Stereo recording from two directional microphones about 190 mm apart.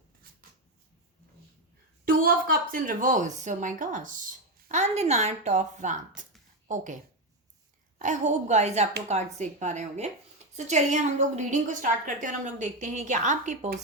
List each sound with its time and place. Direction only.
2.0 s a woman's voice: 50° right (ahead or behind)